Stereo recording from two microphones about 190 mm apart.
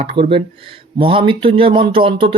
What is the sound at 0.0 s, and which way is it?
Speech, 30° right (ahead or behind).